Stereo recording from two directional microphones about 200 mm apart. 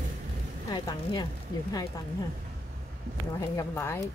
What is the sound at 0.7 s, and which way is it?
Speech, 20° left (ahead or behind).